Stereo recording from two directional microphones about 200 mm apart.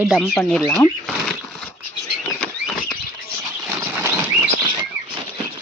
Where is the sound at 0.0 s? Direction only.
Centre (ahead or behind).